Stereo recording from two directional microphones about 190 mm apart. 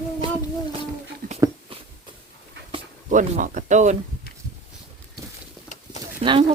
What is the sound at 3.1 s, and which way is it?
Speech, 40° right (ahead or behind).